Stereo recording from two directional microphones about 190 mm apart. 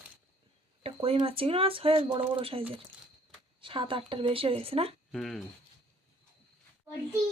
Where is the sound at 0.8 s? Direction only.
30° right (ahead or behind).